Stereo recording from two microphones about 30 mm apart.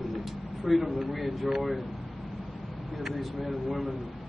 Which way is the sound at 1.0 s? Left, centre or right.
Centre.